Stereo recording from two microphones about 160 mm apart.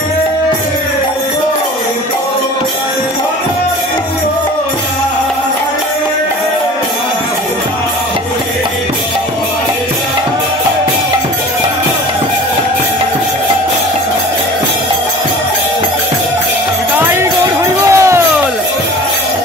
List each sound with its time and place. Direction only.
17.0 s music: 15° right (ahead or behind)